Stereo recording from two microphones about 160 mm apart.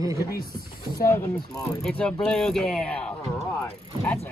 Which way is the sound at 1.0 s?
15° left (ahead or behind).